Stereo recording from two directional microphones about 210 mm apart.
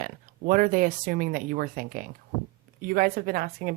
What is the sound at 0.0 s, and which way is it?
A woman's voice, 40° right (ahead or behind).